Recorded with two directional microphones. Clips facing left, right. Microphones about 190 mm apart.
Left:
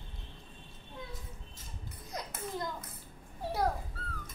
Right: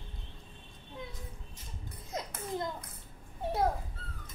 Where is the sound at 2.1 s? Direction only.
25° right (ahead or behind).